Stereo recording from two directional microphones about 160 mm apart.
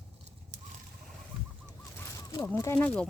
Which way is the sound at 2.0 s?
20° left (ahead or behind).